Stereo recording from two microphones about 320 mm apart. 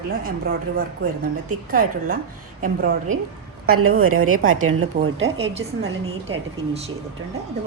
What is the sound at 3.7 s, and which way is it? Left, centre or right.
A woman's voice, right.